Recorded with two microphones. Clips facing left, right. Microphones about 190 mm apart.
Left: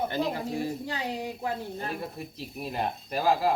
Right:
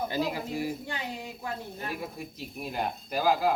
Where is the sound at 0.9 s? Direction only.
35° left (ahead or behind).